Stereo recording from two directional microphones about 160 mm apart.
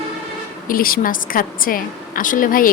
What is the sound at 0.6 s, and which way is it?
Speech, 65° left (ahead or behind).